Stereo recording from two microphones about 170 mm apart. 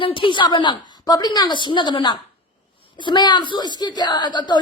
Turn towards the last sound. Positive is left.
turn(degrees=25)  # may be behind; listen again after turning